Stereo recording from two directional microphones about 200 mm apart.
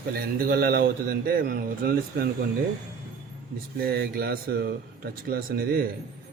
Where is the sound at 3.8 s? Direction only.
50° right (ahead or behind).